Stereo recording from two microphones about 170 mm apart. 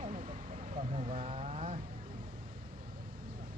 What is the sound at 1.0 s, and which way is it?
Vehicle, 40° right (ahead or behind).